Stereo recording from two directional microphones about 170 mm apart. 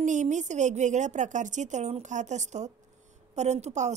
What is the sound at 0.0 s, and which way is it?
A woman's voice, 45° right (ahead or behind).